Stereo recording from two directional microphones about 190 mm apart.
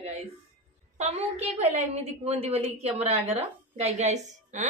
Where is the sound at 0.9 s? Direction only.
35° right (ahead or behind).